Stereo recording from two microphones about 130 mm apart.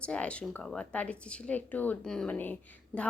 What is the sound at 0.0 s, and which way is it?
A woman's voice, 10° left (ahead or behind).